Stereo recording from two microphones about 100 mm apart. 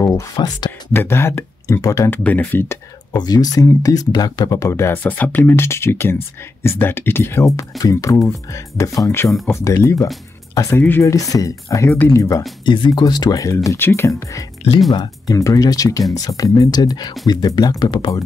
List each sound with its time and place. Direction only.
0.0 s a sound: 30° left (ahead or behind)
0.7 s speech: 25° left (ahead or behind)
2.0 s speech: 20° left (ahead or behind)
3.2 s speech: 40° left (ahead or behind)
4.5 s speech: 30° left (ahead or behind)
12.2 s speech: 35° left (ahead or behind)
12.6 s speech: 50° left (ahead or behind)
13.7 s speech: 25° left (ahead or behind)
14.9 s speech: 40° left (ahead or behind)